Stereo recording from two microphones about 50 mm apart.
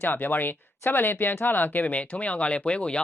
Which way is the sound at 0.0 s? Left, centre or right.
Left.